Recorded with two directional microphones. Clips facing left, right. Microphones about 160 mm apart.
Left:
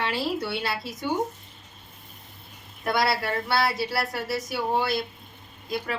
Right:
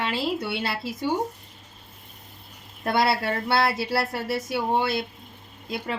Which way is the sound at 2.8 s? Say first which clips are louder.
Right 2 dB; 25° right (ahead or behind).